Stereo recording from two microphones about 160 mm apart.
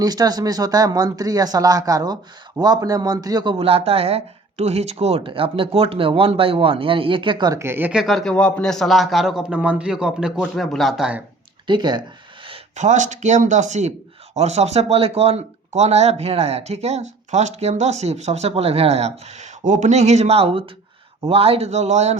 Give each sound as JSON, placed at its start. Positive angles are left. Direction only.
{"t": 0.0, "sound": "speech", "side_deg": -25}
{"t": 11.6, "sound": "speech", "side_deg": -25}
{"t": 12.7, "sound": "speech", "side_deg": -50}